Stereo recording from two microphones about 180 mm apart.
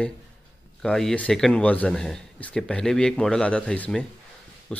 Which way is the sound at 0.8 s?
5° left (ahead or behind).